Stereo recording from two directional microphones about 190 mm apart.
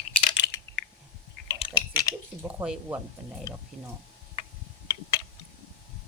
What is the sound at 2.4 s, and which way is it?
Speech, 5° right (ahead or behind).